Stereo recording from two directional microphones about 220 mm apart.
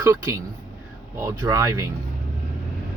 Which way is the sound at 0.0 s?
15° right (ahead or behind).